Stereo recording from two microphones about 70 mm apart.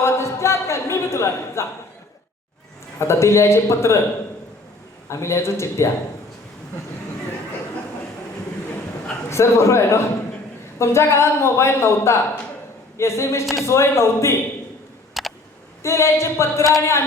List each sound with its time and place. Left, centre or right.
0.0 s a sound: left
3.0 s speech: left
5.0 s speech: left
9.3 s speech: left
15.2 s a sound: centre
15.8 s speech: left